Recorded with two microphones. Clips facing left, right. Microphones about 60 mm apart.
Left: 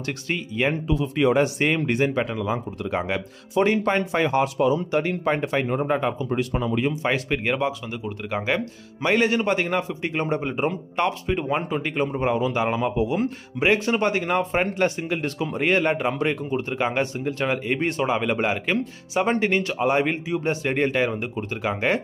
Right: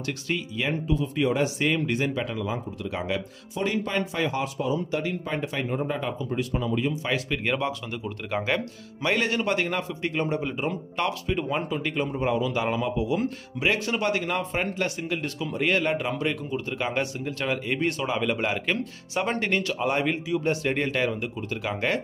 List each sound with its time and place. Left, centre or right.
0.0 s speech: left
0.8 s speech: left
4.6 s speech: left
4.9 s speech: left
5.9 s speech: left
6.1 s speech: left
7.0 s speech: left
7.4 s speech: centre
12.9 s speech: left
13.7 s speech: left
15.2 s speech: left
15.5 s speech: left
16.7 s speech: left